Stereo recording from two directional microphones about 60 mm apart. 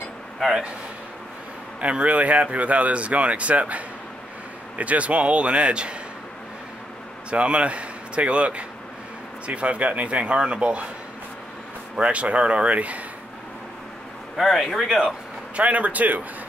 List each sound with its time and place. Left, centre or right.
0.4 s speech: centre
1.8 s speech: right
7.2 s speech: centre
12.0 s speech: right
14.3 s a man's voice: centre
15.5 s speech: right